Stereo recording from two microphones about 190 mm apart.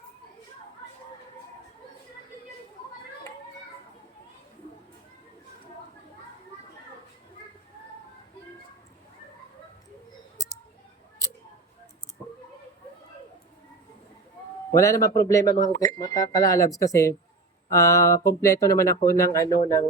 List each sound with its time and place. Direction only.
14.7 s speech: 15° left (ahead or behind)